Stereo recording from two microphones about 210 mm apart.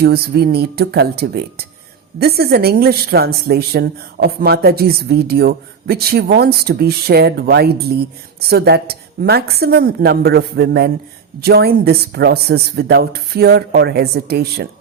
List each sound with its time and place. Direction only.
0.0 s a woman's voice: 50° right (ahead or behind)